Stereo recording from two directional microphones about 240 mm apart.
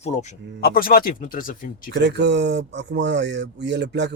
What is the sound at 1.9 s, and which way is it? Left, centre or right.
Speech, right.